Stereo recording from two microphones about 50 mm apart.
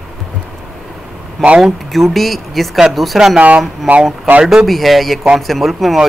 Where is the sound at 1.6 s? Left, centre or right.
Centre.